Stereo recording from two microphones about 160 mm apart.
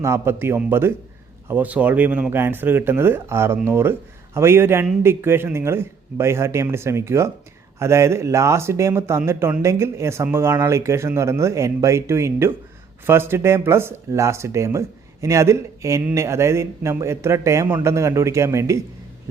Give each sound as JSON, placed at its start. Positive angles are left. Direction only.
{"t": 0.0, "sound": "speech", "side_deg": -15}